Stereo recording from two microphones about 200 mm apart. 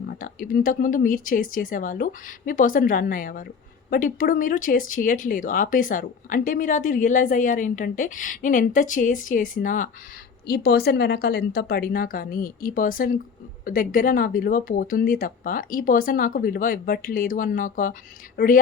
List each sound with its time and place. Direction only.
0.1 s speech: 45° left (ahead or behind)
10.4 s speech: 50° left (ahead or behind)